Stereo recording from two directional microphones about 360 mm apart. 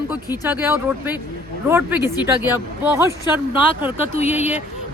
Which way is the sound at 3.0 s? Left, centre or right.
Centre.